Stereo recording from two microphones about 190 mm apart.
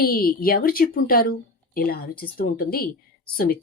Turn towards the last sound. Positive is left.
turn(degrees=50)  # may be behind; listen again after turning